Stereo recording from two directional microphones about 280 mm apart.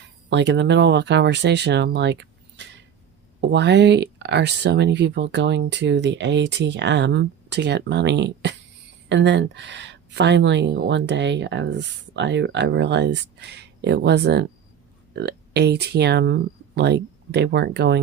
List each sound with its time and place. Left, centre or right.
0.3 s speech: right